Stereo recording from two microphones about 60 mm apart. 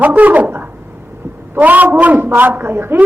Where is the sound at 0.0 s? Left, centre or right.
Right.